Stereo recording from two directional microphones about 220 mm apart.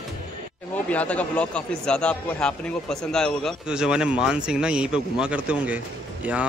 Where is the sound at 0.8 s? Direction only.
5° left (ahead or behind).